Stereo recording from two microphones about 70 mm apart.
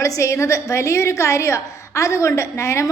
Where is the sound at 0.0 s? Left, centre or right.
Left.